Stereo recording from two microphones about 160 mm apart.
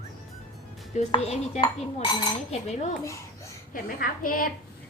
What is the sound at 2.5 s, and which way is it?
Speech, 45° left (ahead or behind).